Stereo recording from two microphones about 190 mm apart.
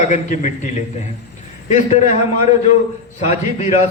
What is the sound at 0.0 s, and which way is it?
Speech, 40° left (ahead or behind).